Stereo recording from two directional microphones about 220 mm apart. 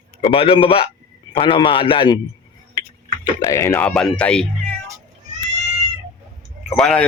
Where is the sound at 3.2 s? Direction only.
15° left (ahead or behind).